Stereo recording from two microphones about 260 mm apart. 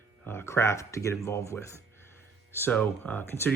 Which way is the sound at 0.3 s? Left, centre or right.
Centre.